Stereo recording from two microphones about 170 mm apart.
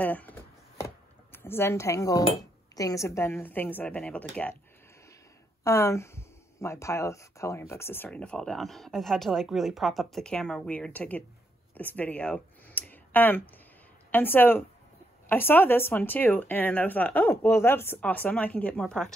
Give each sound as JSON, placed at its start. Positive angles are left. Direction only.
{"t": 0.0, "sound": "a sound", "side_deg": 10}
{"t": 2.7, "sound": "speech", "side_deg": 20}
{"t": 5.6, "sound": "speech", "side_deg": 15}